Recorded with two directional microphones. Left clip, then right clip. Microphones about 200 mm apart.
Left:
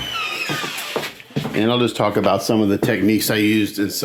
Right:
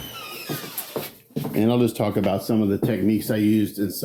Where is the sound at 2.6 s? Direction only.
30° left (ahead or behind).